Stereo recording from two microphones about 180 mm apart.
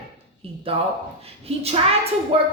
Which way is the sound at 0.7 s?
35° right (ahead or behind).